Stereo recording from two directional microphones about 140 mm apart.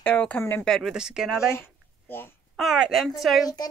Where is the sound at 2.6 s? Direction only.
Centre (ahead or behind).